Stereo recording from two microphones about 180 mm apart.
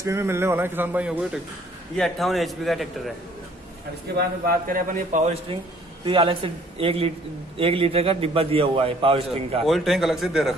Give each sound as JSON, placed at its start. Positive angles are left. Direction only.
{"t": 0.0, "sound": "a man's voice", "side_deg": -15}
{"t": 4.5, "sound": "a man's voice", "side_deg": -50}
{"t": 9.7, "sound": "a man's voice", "side_deg": 0}